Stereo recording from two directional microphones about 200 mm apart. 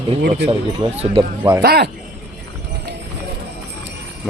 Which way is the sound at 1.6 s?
50° right (ahead or behind).